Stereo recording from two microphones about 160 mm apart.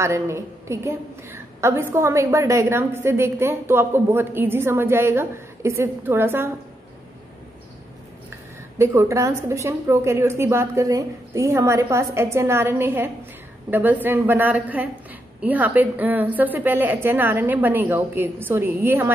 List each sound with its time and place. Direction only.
0.0 s a woman's voice: 15° right (ahead or behind)
8.7 s a woman's voice: 15° right (ahead or behind)